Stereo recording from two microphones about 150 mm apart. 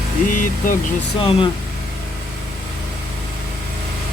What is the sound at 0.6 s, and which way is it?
Speech, 65° left (ahead or behind).